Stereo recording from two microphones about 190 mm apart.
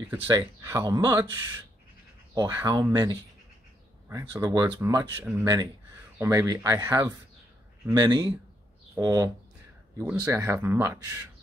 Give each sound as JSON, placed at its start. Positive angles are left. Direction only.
{"t": 0.1, "sound": "speech", "side_deg": -20}